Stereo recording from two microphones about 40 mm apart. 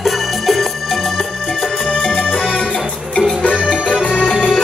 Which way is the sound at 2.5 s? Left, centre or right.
Left.